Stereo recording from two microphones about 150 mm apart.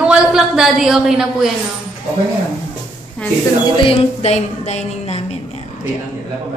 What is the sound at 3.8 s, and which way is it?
Music, 40° left (ahead or behind).